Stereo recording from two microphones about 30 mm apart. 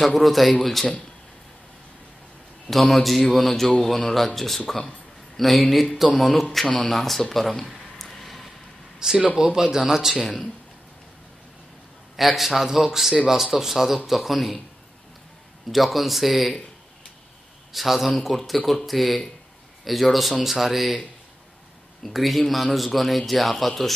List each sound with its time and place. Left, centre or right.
0.0 s a man's voice: centre
2.7 s a man's voice: centre
9.0 s speech: right
10.2 s speech: centre
12.2 s speech: centre
15.7 s a man's voice: centre
17.7 s a man's voice: centre
22.0 s a man's voice: centre